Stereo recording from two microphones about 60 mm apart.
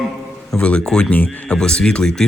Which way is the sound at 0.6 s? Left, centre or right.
Centre.